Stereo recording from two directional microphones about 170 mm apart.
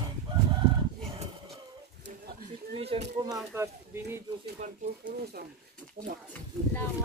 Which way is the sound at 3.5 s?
15° right (ahead or behind).